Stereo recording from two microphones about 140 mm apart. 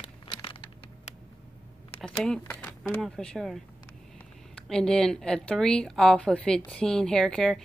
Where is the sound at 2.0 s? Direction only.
5° left (ahead or behind).